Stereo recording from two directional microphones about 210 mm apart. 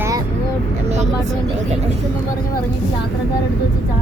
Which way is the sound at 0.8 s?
35° right (ahead or behind).